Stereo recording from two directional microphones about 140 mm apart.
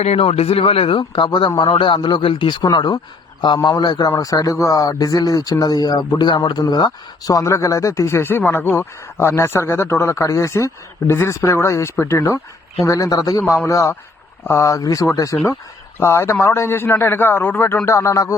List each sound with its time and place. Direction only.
0.0 s a man's voice: 45° left (ahead or behind); by 18.3 s 20° left (ahead or behind)